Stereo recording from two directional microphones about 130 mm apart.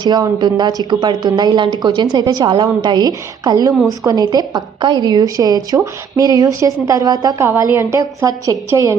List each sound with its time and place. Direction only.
0.0 s a woman's voice: 30° right (ahead or behind)
7.4 s a woman's voice: 20° right (ahead or behind)